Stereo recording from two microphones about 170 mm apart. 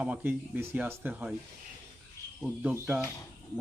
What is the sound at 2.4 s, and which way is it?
Speech, 10° right (ahead or behind).